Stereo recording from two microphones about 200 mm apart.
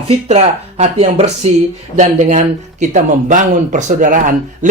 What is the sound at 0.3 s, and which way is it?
Speech, 35° right (ahead or behind).